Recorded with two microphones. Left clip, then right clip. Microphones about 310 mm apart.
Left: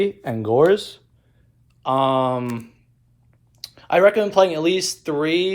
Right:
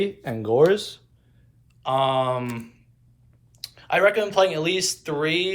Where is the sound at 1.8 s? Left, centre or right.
Centre.